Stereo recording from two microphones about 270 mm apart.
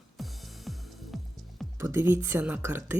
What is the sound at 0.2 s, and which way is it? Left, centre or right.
Music, centre.